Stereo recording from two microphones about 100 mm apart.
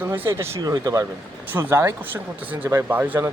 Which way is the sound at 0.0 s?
25° right (ahead or behind).